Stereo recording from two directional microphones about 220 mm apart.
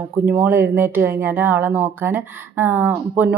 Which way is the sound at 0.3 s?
10° right (ahead or behind).